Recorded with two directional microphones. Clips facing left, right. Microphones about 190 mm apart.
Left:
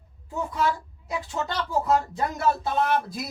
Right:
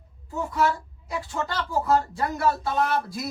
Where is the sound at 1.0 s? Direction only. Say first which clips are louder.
Even; 20° left (ahead or behind).